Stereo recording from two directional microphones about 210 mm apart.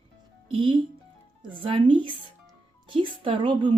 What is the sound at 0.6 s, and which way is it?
Speech, 25° right (ahead or behind).